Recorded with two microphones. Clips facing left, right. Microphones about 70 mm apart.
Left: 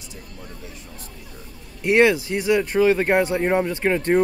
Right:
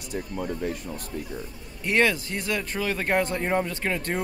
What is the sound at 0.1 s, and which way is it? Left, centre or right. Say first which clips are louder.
Speech: right 12 dB; right.